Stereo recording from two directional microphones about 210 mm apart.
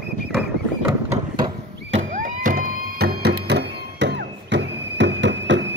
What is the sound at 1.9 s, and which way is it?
Music, 35° right (ahead or behind).